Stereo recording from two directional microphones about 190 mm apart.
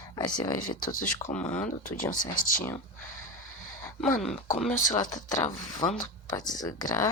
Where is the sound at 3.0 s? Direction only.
90° left.